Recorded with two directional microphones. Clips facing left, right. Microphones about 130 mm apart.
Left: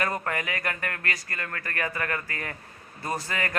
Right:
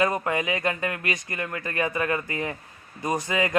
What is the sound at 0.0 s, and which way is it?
Speech, 20° right (ahead or behind).